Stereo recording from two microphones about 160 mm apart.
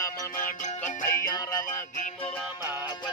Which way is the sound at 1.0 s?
15° left (ahead or behind).